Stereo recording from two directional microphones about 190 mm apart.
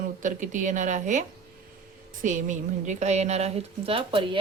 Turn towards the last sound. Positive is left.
turn(degrees=-25)  # may be behind; listen again after turning